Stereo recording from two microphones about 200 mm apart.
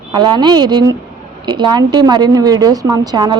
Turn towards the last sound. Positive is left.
turn(degrees=-20)  # may be behind; listen again after turning